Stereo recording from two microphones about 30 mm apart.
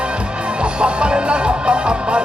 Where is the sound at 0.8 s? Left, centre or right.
Right.